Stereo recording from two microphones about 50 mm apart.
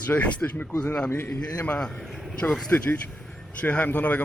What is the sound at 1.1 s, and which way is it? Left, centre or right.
Speech, left.